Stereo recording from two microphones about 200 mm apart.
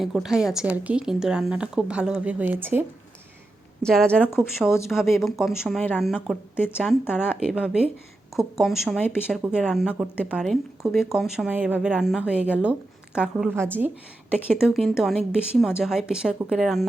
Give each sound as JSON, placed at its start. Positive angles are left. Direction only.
{"t": 0.0, "sound": "a woman's voice", "side_deg": 0}
{"t": 3.8, "sound": "a woman's voice", "side_deg": 5}
{"t": 6.7, "sound": "speech", "side_deg": 10}
{"t": 7.1, "sound": "a woman's voice", "side_deg": -5}